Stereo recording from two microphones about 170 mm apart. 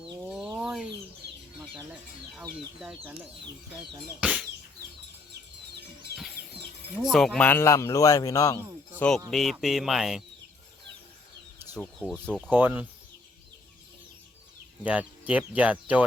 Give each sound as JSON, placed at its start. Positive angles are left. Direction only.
{"t": 0.0, "sound": "chicken", "side_deg": 0}
{"t": 2.8, "sound": "speech", "side_deg": -10}
{"t": 7.0, "sound": "a man's voice", "side_deg": 0}
{"t": 9.0, "sound": "speech", "side_deg": 5}
{"t": 11.8, "sound": "speech", "side_deg": 5}
{"t": 12.5, "sound": "speech", "side_deg": -10}
{"t": 14.8, "sound": "speech", "side_deg": -10}